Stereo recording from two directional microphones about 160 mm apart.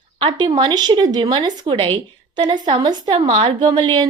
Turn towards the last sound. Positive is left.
turn(degrees=-25)  # may be behind; listen again after turning